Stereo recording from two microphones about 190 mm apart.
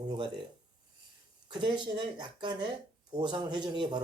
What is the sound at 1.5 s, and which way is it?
Speech, 25° right (ahead or behind).